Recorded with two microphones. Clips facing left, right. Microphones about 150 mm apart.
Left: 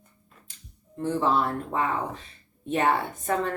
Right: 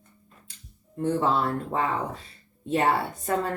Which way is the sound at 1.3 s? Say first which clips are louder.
Even; 30° right (ahead or behind).